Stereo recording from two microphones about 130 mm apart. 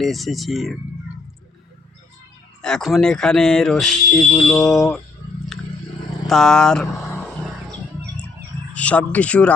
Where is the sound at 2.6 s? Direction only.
Centre (ahead or behind).